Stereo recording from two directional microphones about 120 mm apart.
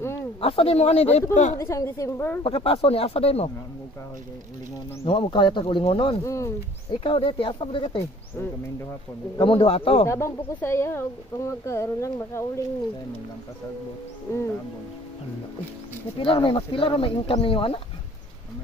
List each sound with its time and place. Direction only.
0.4 s speech: 50° left (ahead or behind)
1.3 s a woman's voice: 80° left
1.6 s speech: 25° left (ahead or behind)
2.4 s speech: 50° left (ahead or behind)
5.0 s speech: 45° left (ahead or behind)
6.2 s speech: 25° left (ahead or behind)
6.9 s speech: 45° left (ahead or behind)
9.4 s speech: 50° left (ahead or behind)
10.0 s speech: 25° left (ahead or behind)
16.2 s speech: 45° left (ahead or behind)